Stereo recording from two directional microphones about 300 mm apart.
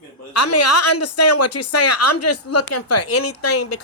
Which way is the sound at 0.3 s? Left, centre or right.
Left.